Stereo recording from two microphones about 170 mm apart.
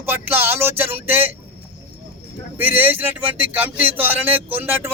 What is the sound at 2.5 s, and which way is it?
Speech, 10° right (ahead or behind).